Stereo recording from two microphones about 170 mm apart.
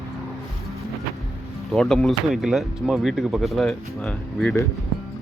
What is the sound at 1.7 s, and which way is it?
Speech, centre (ahead or behind).